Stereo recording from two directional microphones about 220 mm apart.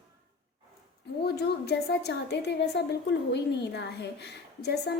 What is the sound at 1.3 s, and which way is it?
A woman's voice, 45° left (ahead or behind).